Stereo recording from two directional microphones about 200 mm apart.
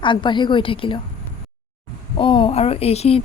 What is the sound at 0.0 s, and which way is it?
Speech, 25° left (ahead or behind).